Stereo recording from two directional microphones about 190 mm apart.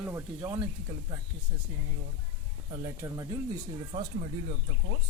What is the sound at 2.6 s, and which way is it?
Speech, 15° right (ahead or behind).